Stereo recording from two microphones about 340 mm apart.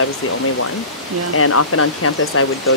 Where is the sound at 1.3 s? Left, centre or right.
Left.